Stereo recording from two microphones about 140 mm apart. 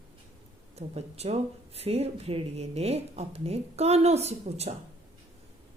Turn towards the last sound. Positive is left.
turn(degrees=-50)  # may be behind; listen again after turning